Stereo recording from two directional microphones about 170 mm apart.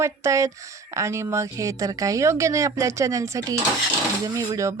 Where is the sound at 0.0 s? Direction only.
15° right (ahead or behind).